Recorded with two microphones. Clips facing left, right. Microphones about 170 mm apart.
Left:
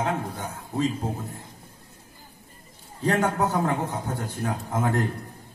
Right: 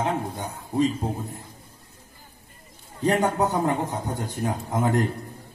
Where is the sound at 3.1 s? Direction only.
20° right (ahead or behind).